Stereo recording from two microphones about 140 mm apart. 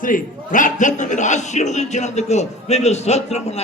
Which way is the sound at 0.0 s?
70° left (ahead or behind).